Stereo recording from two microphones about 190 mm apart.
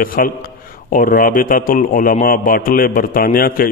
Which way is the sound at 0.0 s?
50° left (ahead or behind).